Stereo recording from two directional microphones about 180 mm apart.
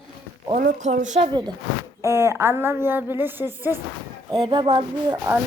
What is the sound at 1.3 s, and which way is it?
Music, 25° right (ahead or behind).